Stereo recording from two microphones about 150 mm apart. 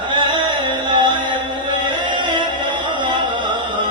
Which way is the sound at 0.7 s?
30° right (ahead or behind).